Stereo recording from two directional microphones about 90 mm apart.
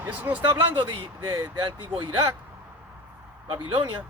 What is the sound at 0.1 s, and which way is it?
Speech, 15° right (ahead or behind).